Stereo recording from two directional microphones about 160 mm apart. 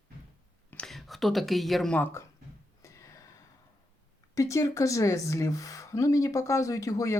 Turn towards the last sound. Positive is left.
turn(degrees=20)  # may be behind; listen again after turning